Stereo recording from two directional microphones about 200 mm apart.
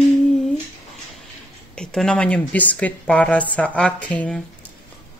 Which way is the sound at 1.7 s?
5° left (ahead or behind).